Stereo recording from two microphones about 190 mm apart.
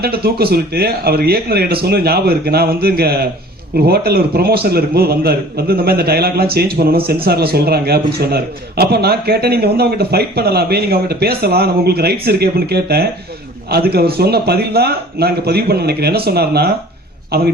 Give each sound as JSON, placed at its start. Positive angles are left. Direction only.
{"t": 0.0, "sound": "a man's voice", "side_deg": -55}